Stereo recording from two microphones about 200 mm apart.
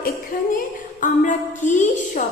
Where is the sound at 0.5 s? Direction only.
40° left (ahead or behind).